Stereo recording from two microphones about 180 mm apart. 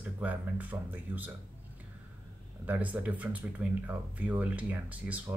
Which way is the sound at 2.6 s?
10° right (ahead or behind).